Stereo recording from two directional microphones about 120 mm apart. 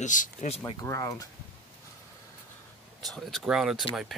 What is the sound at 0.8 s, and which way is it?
Speech, 25° left (ahead or behind).